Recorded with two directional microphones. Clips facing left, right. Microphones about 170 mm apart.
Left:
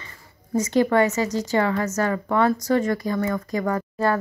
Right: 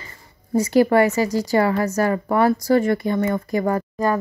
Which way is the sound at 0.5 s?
35° right (ahead or behind).